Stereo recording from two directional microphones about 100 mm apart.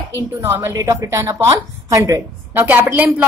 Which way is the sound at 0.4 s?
25° right (ahead or behind).